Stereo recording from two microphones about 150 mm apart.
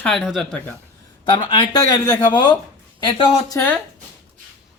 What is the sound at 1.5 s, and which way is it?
Speech, 30° left (ahead or behind).